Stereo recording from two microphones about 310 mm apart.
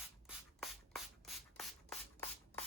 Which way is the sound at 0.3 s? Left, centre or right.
Centre.